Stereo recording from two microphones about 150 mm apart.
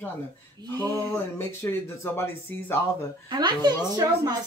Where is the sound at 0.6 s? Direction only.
30° right (ahead or behind).